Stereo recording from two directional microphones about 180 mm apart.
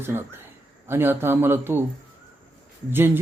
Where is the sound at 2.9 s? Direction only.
10° right (ahead or behind).